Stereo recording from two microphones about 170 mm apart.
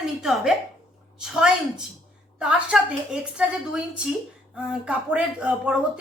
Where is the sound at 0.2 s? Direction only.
Centre (ahead or behind).